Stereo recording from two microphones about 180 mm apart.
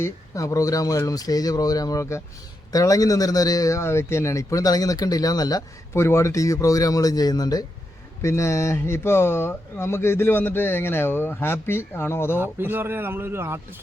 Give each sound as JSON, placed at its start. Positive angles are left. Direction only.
{"t": 0.0, "sound": "a man's voice", "side_deg": 20}
{"t": 12.4, "sound": "speech", "side_deg": -10}